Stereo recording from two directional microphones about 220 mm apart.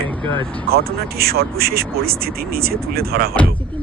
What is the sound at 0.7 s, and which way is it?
Speech, 45° right (ahead or behind).